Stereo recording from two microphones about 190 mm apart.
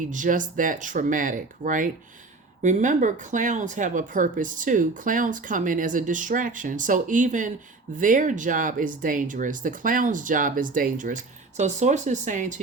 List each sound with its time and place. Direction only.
0.0 s speech: 40° right (ahead or behind)